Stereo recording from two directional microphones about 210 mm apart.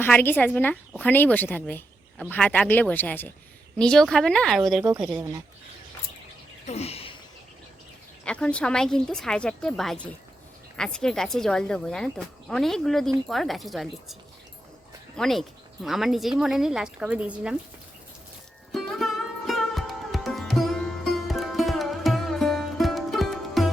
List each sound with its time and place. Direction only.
0.0 s a woman's voice: 10° left (ahead or behind)
5.1 s speech: 15° right (ahead or behind)
6.7 s a sound: 30° left (ahead or behind)
8.2 s speech: 5° left (ahead or behind)
18.7 s music: centre (ahead or behind)